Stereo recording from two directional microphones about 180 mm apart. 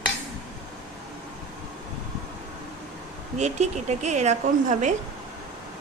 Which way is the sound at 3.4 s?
40° right (ahead or behind).